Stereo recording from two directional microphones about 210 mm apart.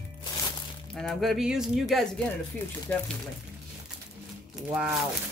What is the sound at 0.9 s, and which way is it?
Speech, centre (ahead or behind).